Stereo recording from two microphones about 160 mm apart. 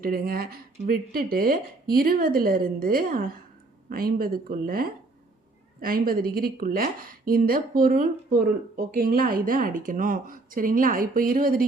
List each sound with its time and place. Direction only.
0.0 s a woman's voice: 65° right (ahead or behind)